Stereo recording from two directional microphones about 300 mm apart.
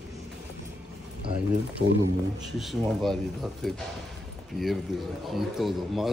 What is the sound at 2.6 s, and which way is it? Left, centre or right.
Speech, centre.